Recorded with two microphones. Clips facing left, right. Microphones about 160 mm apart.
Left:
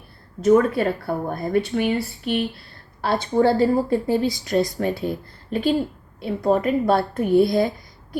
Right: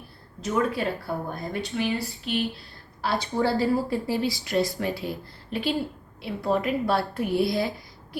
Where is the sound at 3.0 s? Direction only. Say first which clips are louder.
Left 6 dB; 50° left (ahead or behind).